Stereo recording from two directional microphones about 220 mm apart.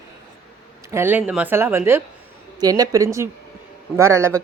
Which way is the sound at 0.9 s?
10° right (ahead or behind).